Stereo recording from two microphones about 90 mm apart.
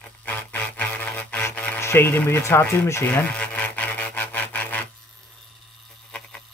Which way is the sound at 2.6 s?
30° left (ahead or behind).